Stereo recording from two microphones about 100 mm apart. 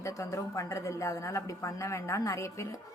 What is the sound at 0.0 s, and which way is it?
A woman's voice, 30° left (ahead or behind).